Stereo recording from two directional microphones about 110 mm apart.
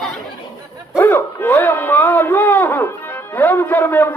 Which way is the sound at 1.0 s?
20° left (ahead or behind).